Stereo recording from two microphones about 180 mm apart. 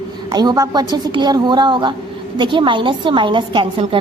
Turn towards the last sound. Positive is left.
turn(degrees=-30)  # may be behind; listen again after turning